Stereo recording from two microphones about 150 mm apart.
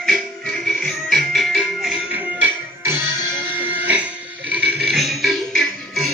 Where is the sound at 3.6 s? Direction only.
10° right (ahead or behind).